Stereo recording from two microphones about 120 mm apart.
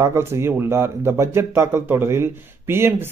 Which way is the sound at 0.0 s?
20° right (ahead or behind).